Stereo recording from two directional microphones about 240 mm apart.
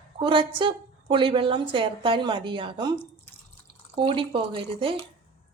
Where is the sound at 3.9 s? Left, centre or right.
Right.